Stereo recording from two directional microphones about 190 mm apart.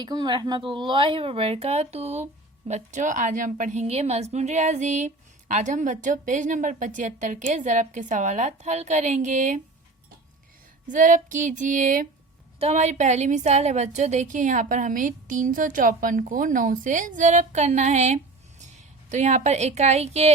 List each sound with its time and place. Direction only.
0.0 s a woman's voice: 20° right (ahead or behind); by 9.6 s 40° right (ahead or behind)
10.8 s a sound: 40° right (ahead or behind)
12.5 s a woman's voice: 35° right (ahead or behind)